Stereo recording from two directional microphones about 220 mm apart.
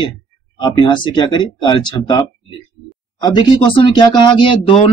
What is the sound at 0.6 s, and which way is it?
Speech, 20° left (ahead or behind).